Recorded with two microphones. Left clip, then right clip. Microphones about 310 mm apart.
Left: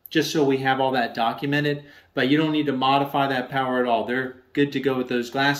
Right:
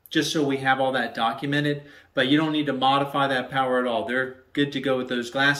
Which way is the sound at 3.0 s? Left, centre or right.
Left.